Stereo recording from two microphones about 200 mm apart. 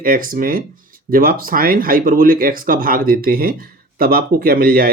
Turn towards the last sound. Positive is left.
turn(degrees=-45)  # may be behind; listen again after turning